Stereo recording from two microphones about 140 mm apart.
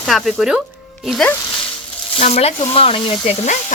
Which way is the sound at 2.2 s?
45° left (ahead or behind).